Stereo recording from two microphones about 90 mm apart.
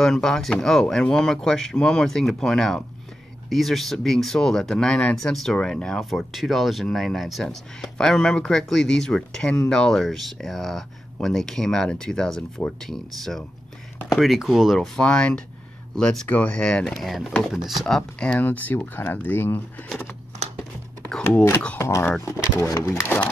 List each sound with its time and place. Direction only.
0.0 s speech: 5° left (ahead or behind)
15.0 s speech: 10° left (ahead or behind)
21.2 s speech: 20° left (ahead or behind)
21.7 s speech: 30° left (ahead or behind)